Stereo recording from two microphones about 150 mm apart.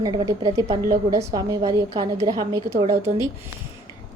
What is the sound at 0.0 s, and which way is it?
A woman's voice, 25° right (ahead or behind).